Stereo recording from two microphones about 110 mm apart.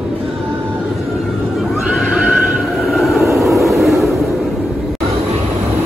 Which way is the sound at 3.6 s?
Centre (ahead or behind).